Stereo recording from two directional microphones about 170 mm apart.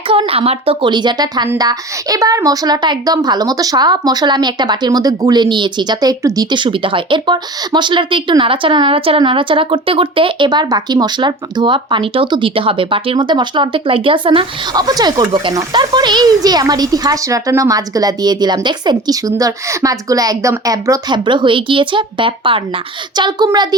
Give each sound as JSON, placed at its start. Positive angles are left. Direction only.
{"t": 0.1, "sound": "a woman's voice", "side_deg": -35}